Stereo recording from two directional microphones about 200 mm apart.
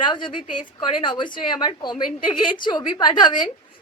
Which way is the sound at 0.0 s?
25° left (ahead or behind).